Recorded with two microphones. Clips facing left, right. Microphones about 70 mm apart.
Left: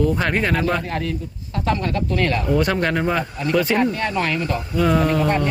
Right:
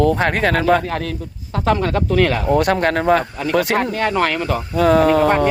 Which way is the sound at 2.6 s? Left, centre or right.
Right.